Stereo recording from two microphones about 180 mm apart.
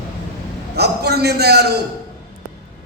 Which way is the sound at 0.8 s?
65° right (ahead or behind).